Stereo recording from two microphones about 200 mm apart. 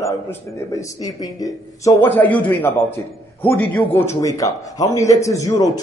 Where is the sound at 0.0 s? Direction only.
15° left (ahead or behind).